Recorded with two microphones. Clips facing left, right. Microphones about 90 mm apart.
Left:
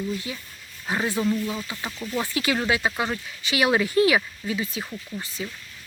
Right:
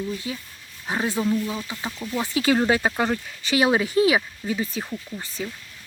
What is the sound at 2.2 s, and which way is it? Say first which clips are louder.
Speech: right 6 dB; 25° right (ahead or behind).